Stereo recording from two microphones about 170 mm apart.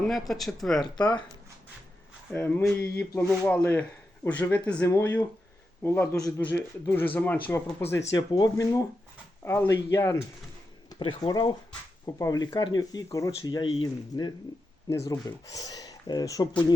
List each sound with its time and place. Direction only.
0.1 s speech: centre (ahead or behind)
0.9 s speech: 25° left (ahead or behind)
2.3 s speech: 10° left (ahead or behind)